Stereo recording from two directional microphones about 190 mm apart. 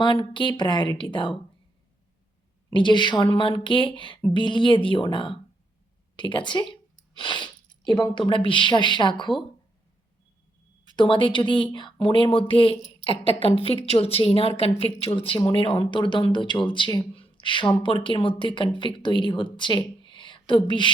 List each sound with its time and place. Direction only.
0.0 s speech: 25° left (ahead or behind)
2.6 s speech: 25° left (ahead or behind)
10.9 s speech: 25° left (ahead or behind)